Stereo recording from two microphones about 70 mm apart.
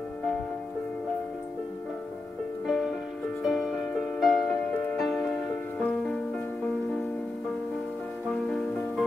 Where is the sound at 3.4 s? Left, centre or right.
Centre.